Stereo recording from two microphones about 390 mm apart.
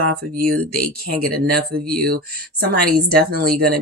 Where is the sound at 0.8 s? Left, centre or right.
Centre.